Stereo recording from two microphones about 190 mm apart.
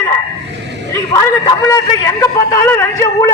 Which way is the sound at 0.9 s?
15° left (ahead or behind).